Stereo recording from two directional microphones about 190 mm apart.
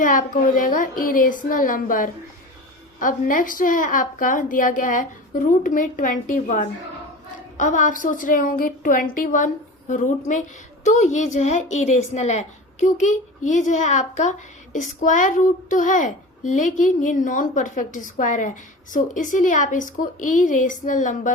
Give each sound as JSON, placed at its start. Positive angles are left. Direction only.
{"t": 0.0, "sound": "a woman's voice", "side_deg": 45}